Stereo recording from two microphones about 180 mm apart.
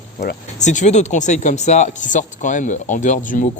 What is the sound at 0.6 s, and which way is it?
Speech, 40° left (ahead or behind).